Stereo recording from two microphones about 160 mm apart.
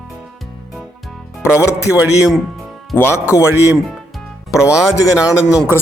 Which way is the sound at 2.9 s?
15° left (ahead or behind).